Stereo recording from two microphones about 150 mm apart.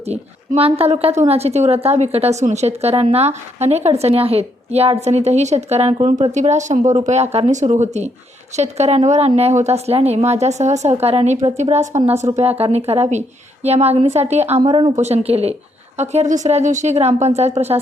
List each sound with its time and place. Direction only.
0.0 s a woman's voice: 45° right (ahead or behind)
14.6 s speech: 30° right (ahead or behind)
14.9 s a woman's voice: 45° right (ahead or behind)